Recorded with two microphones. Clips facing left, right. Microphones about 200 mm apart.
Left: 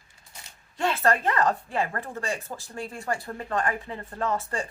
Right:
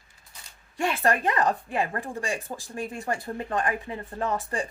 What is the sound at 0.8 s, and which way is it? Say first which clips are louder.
Speech: even; 15° right (ahead or behind).